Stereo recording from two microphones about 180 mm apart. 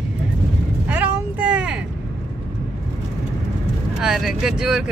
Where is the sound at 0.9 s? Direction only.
10° right (ahead or behind).